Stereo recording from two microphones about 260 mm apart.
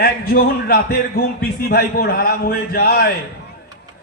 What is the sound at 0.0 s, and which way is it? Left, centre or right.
A man's voice, left.